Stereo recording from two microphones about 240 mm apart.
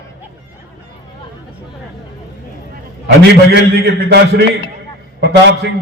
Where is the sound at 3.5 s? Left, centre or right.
Right.